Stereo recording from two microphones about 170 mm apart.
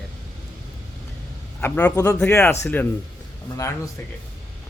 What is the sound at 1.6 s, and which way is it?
A man's voice, 10° left (ahead or behind).